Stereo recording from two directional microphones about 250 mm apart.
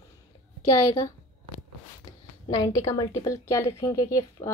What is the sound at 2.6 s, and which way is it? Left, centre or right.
Speech, centre.